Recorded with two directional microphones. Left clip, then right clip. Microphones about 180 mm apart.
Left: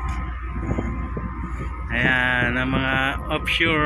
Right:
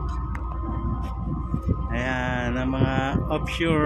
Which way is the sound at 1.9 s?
15° right (ahead or behind).